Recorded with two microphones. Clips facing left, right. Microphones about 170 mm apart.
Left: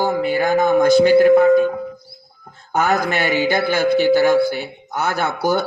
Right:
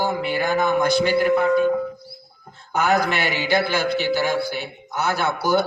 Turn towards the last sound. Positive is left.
turn(degrees=50)  # may be behind; listen again after turning